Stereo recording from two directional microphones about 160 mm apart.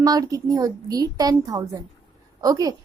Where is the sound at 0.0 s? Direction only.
20° right (ahead or behind).